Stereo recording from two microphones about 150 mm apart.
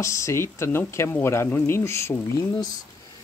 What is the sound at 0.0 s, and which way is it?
Speech, 20° left (ahead or behind).